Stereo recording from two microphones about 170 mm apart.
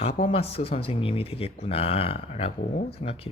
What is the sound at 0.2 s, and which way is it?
Speech, 35° left (ahead or behind).